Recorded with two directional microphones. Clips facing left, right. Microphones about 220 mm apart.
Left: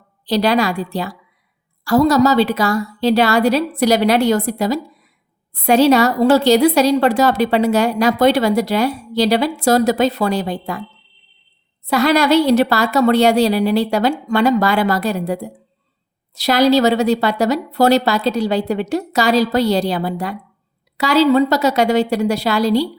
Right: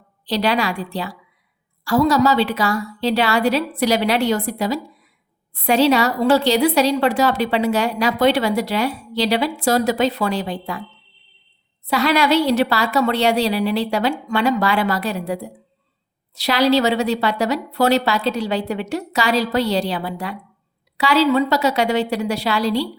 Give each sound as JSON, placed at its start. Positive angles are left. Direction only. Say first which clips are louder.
{"t": 0.3, "sound": "a woman's voice", "louder": "left 4 dB", "side_deg": 40}
{"t": 11.9, "sound": "a woman's voice", "louder": "left 3 dB", "side_deg": 45}